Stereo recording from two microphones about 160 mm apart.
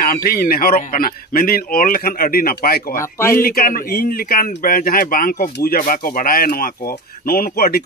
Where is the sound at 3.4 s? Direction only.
65° left (ahead or behind).